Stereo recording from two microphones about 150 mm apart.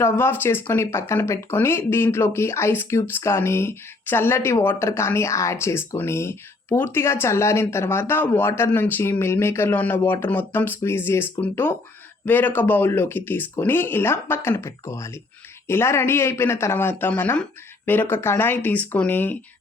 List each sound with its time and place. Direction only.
0.0 s speech: 15° left (ahead or behind)